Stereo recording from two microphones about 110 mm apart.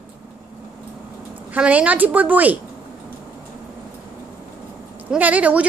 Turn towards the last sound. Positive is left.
turn(degrees=-15)  # may be behind; listen again after turning